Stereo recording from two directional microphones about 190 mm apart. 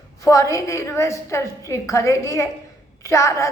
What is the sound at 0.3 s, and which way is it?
A woman's voice, 15° left (ahead or behind).